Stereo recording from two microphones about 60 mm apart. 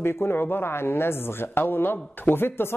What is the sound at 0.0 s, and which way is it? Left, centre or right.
Speech, left.